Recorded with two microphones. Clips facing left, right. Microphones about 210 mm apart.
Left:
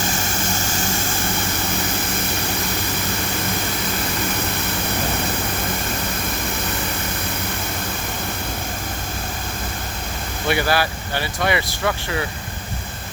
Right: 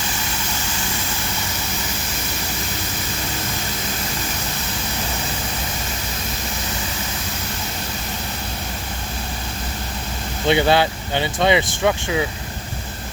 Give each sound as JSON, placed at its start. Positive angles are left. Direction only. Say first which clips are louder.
{"t": 10.4, "sound": "speech", "louder": "right 4 dB", "side_deg": -20}